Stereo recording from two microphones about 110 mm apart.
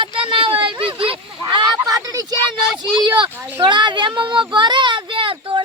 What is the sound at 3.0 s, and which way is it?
Speech, 45° right (ahead or behind).